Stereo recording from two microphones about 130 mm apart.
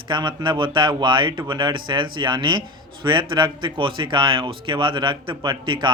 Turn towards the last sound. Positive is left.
turn(degrees=-35)  # may be behind; listen again after turning